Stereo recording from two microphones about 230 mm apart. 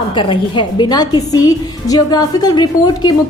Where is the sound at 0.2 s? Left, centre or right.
Left.